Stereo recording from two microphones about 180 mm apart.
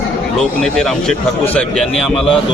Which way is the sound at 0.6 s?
5° left (ahead or behind).